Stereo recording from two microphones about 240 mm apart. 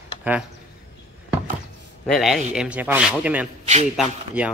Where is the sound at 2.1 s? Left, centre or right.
Centre.